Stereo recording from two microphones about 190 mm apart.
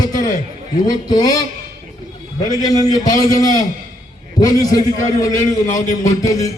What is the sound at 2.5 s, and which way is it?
A man's voice, 20° left (ahead or behind).